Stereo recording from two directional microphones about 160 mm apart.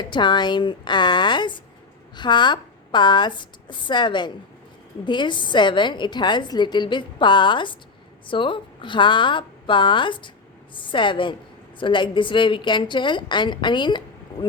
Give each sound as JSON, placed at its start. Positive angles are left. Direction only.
{"t": 0.0, "sound": "a woman's voice", "side_deg": 30}